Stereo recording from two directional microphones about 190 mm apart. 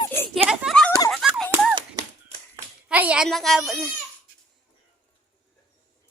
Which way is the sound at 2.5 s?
10° right (ahead or behind).